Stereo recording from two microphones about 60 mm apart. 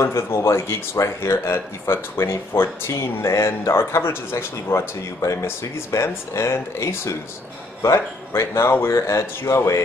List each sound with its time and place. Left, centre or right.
0.0 s speech: left
8.3 s speech: left